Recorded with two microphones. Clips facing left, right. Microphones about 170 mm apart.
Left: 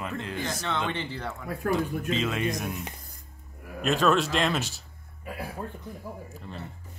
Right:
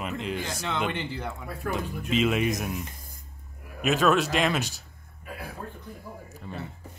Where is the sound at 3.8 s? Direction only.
5° right (ahead or behind).